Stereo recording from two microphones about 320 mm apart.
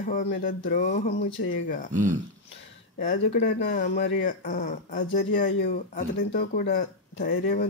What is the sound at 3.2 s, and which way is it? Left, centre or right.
Speech, left.